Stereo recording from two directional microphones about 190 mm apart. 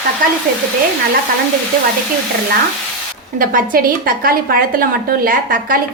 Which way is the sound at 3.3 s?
45° right (ahead or behind).